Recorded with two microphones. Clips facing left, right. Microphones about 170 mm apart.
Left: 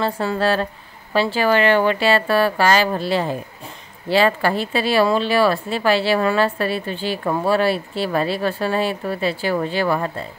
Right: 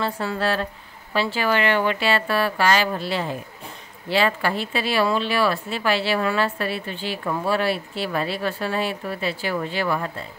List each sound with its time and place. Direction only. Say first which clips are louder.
0.0 s speech: left 4 dB; 35° left (ahead or behind)